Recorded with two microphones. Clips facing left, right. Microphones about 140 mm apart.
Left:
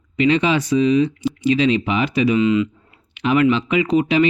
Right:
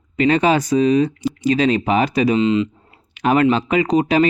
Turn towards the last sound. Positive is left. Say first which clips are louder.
# right 1 dB
turn(degrees=-40)  # may be behind; listen again after turning